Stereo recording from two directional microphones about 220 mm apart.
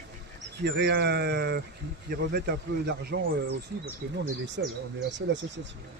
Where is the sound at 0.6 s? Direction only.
50° right (ahead or behind).